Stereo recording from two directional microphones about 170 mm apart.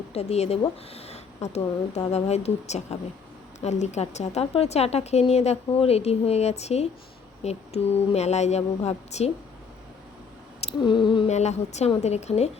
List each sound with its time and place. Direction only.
0.1 s speech: 40° left (ahead or behind)
10.6 s a sound: 35° left (ahead or behind)
11.3 s speech: 40° left (ahead or behind)